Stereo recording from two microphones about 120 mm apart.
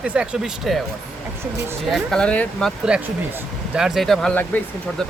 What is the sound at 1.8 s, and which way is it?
Speech, centre (ahead or behind).